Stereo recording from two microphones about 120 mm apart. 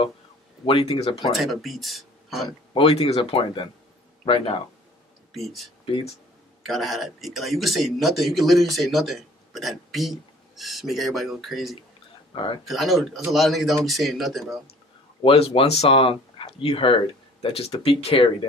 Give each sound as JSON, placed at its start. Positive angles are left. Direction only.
{"t": 0.7, "sound": "speech", "side_deg": 50}
{"t": 1.3, "sound": "speech", "side_deg": 0}
{"t": 2.7, "sound": "speech", "side_deg": 55}
{"t": 5.3, "sound": "speech", "side_deg": 0}
{"t": 5.9, "sound": "speech", "side_deg": 45}
{"t": 6.7, "sound": "speech", "side_deg": 0}
{"t": 15.2, "sound": "speech", "side_deg": 50}